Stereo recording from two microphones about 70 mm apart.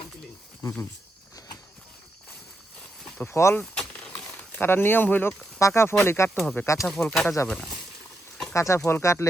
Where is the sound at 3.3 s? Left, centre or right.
Left.